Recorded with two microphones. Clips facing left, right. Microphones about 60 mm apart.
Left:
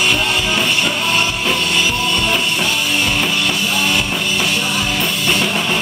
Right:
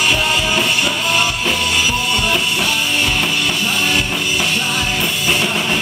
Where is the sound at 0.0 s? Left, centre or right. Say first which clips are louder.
Even; centre.